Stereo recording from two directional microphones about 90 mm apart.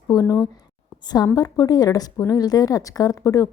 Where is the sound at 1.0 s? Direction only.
50° left (ahead or behind).